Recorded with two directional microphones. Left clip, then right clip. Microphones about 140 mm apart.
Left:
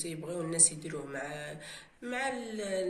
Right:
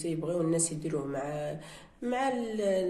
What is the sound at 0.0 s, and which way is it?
Speech, 45° right (ahead or behind).